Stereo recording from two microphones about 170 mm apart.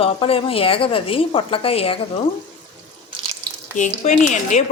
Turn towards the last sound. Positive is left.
turn(degrees=45)  # may be behind; listen again after turning